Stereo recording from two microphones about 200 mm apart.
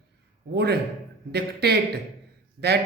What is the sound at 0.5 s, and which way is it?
Speech, 55° right (ahead or behind).